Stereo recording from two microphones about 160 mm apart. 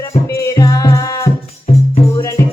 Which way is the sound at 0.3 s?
20° left (ahead or behind).